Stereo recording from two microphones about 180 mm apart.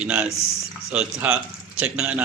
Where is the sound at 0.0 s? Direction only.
5° right (ahead or behind).